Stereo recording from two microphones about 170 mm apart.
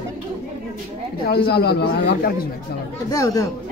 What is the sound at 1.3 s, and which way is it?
Speech, 70° left (ahead or behind).